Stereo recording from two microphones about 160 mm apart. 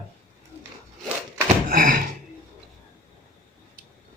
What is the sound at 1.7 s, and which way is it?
Thunk, 60° right (ahead or behind).